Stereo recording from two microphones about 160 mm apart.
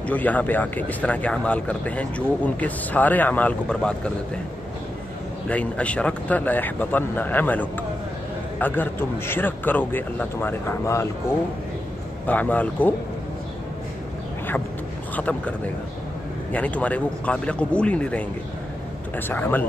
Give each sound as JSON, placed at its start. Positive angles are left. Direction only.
{"t": 0.0, "sound": "speech", "side_deg": 10}
{"t": 5.5, "sound": "speech", "side_deg": 10}
{"t": 12.3, "sound": "speech", "side_deg": 10}
{"t": 15.1, "sound": "speech", "side_deg": 10}